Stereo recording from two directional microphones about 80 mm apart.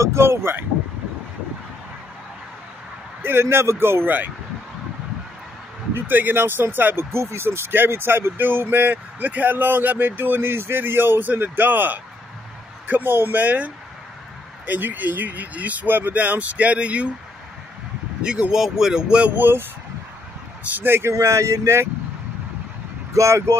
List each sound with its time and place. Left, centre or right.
0.0 s speech: right
3.2 s speech: right
5.9 s speech: right
14.7 s speech: right
18.2 s speech: centre
19.3 s speech: right
20.7 s speech: right
21.1 s speech: right
23.1 s speech: right